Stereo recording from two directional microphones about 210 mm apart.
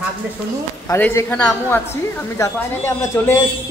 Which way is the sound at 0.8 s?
10° left (ahead or behind).